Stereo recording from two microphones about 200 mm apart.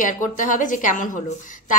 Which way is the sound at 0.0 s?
40° left (ahead or behind).